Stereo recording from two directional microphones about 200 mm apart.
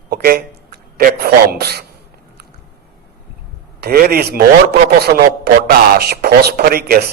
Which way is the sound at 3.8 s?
50° right (ahead or behind).